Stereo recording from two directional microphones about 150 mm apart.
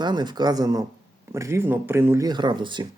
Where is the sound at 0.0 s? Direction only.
30° right (ahead or behind).